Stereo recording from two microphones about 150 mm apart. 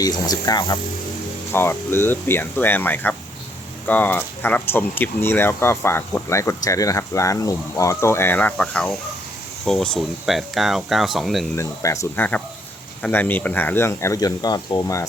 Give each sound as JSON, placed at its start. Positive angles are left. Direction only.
{"t": 0.0, "sound": "speech", "side_deg": 25}
{"t": 1.5, "sound": "speech", "side_deg": 15}
{"t": 11.5, "sound": "speech", "side_deg": 20}